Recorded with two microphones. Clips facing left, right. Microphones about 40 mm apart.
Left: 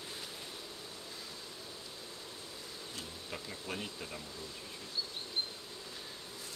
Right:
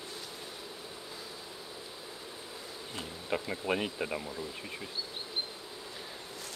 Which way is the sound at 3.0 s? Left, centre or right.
Right.